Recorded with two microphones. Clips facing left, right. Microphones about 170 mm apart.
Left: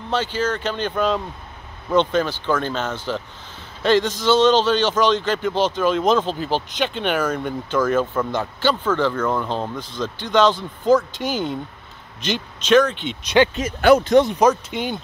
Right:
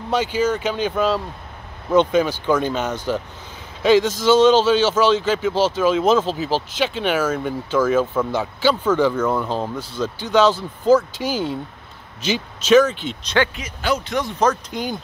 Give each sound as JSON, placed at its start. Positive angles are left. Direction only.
{"t": 0.1, "sound": "speech", "side_deg": -10}
{"t": 13.6, "sound": "speech", "side_deg": 55}
{"t": 14.4, "sound": "speech", "side_deg": 5}